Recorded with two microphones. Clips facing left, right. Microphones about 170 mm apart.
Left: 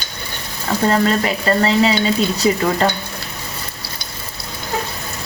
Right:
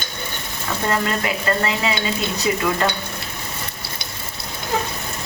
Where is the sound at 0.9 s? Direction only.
30° left (ahead or behind).